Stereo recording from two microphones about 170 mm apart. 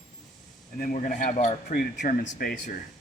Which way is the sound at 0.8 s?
50° left (ahead or behind).